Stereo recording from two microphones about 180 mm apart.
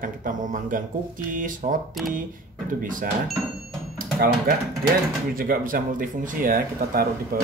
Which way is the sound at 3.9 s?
50° right (ahead or behind).